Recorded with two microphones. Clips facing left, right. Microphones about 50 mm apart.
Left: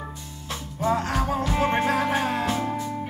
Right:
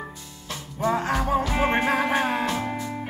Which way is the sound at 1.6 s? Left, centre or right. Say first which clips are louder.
Left 2 dB; centre.